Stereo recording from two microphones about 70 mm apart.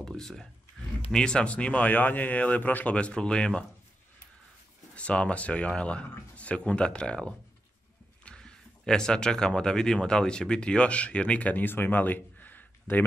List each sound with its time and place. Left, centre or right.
0.0 s speech: centre
4.9 s speech: centre